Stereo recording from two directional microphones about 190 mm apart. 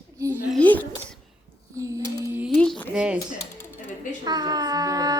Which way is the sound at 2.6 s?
5° left (ahead or behind).